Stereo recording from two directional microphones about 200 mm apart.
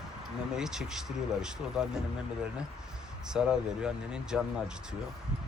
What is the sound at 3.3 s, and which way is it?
Speech, 5° right (ahead or behind).